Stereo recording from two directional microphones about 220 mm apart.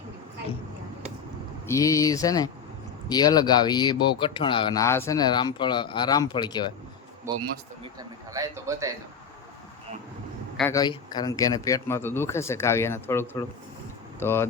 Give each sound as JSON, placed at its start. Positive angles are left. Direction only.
{"t": 1.6, "sound": "speech", "side_deg": 15}
{"t": 7.3, "sound": "a man's voice", "side_deg": -15}
{"t": 10.6, "sound": "speech", "side_deg": 15}